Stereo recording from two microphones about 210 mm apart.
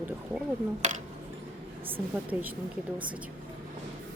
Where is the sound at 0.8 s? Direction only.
35° right (ahead or behind).